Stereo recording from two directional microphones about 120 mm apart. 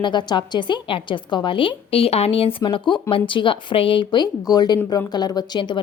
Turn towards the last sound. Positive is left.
turn(degrees=35)  # may be behind; listen again after turning